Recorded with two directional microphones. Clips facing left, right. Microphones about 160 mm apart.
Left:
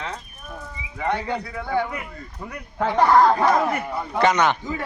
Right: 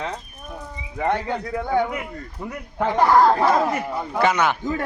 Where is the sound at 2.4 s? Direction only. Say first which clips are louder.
Right 1 dB; 5° right (ahead or behind).